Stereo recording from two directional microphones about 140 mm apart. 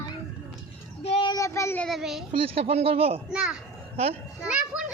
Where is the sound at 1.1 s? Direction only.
35° left (ahead or behind).